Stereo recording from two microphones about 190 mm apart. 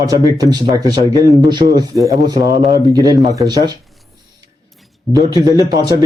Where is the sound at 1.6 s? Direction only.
30° right (ahead or behind).